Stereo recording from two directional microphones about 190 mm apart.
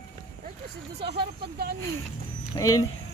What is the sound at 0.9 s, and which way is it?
Speech, 60° right (ahead or behind).